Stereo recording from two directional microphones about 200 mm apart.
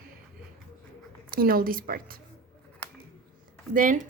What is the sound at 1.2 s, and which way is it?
Speech, 45° right (ahead or behind).